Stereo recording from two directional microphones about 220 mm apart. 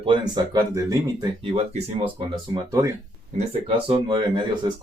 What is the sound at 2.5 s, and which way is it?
Speech, 15° right (ahead or behind).